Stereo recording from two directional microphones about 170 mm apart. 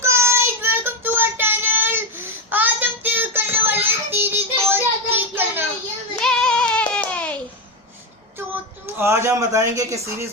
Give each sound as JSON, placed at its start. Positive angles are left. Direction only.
{"t": 0.0, "sound": "child singing", "side_deg": -15}
{"t": 6.1, "sound": "child singing", "side_deg": 5}
{"t": 9.0, "sound": "a man's voice", "side_deg": -15}